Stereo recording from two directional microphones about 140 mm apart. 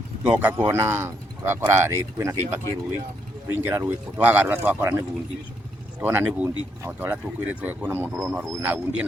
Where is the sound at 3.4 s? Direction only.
15° right (ahead or behind).